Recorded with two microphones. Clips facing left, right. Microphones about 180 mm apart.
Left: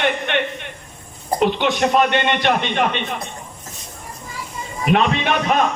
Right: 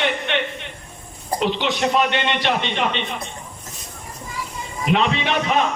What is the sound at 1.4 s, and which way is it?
A man's voice, 55° left (ahead or behind).